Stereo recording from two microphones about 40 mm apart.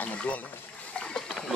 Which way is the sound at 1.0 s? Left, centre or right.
Centre.